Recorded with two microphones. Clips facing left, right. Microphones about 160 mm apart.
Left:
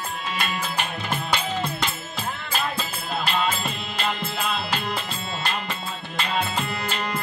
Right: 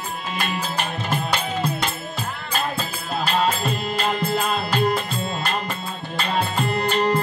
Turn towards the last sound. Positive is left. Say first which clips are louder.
# right 9 dB
turn(degrees=-35)  # may be behind; listen again after turning